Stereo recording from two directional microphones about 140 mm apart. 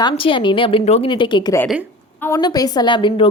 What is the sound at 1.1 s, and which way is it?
A woman's voice, 35° left (ahead or behind).